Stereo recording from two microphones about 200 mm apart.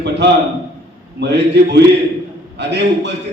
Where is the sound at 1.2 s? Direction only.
60° right (ahead or behind).